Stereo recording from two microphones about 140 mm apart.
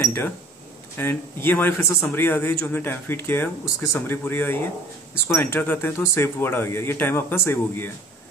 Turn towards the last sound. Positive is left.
turn(degrees=15)  # may be behind; listen again after turning